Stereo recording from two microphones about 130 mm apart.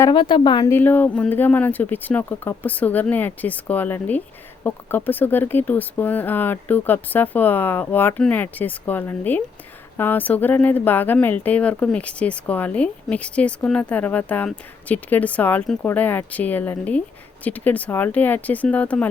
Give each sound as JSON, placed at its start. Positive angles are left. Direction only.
{"t": 0.1, "sound": "a woman's voice", "side_deg": 40}
{"t": 0.7, "sound": "speech", "side_deg": 15}